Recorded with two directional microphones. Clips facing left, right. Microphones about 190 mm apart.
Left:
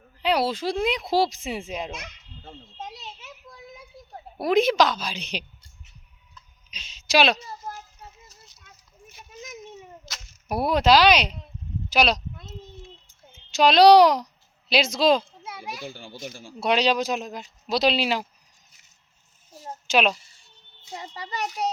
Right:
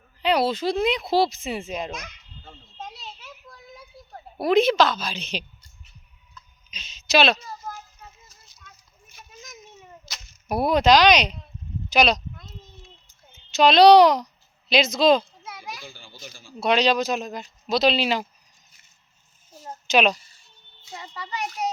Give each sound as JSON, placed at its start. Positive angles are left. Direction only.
{"t": 0.2, "sound": "speech", "side_deg": 10}
{"t": 2.0, "sound": "a sound", "side_deg": 25}
{"t": 4.4, "sound": "speech", "side_deg": 10}
{"t": 6.7, "sound": "a woman's voice", "side_deg": 10}
{"t": 10.1, "sound": "speech", "side_deg": 5}
{"t": 13.5, "sound": "speech", "side_deg": 10}
{"t": 15.2, "sound": "children playing", "side_deg": 25}
{"t": 16.0, "sound": "speech", "side_deg": 65}
{"t": 16.6, "sound": "speech", "side_deg": 10}
{"t": 19.5, "sound": "a child's voice", "side_deg": 5}
{"t": 20.9, "sound": "a child's voice", "side_deg": 35}